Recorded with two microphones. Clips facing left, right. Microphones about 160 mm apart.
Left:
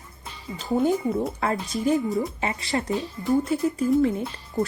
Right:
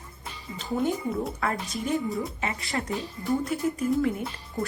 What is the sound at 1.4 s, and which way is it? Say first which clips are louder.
Speech: left 5 dB; 30° left (ahead or behind).